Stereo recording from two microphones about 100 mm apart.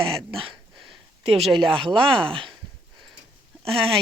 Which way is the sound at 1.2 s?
80° right.